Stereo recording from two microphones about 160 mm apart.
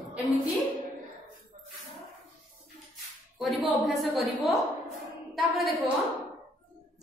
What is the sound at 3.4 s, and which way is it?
A woman's voice, centre (ahead or behind).